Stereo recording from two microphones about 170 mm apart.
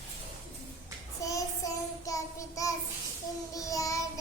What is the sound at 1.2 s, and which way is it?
Child singing, 20° left (ahead or behind).